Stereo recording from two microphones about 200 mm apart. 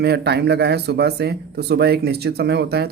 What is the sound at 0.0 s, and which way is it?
Speech, 55° right (ahead or behind).